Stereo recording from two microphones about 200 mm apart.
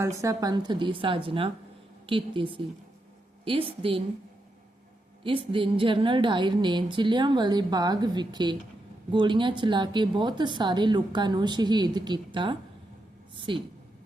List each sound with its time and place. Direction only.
0.2 s speech: 15° right (ahead or behind)
5.2 s speech: 25° right (ahead or behind)